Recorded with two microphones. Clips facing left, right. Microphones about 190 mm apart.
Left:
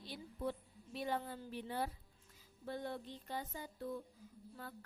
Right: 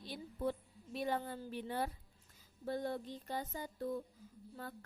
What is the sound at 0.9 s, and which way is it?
Speech, 50° right (ahead or behind).